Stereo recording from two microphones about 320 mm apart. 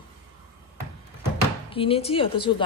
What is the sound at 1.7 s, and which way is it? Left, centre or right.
Speech, centre.